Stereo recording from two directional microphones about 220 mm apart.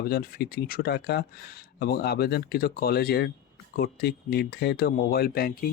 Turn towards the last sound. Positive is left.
turn(degrees=45)  # may be behind; listen again after turning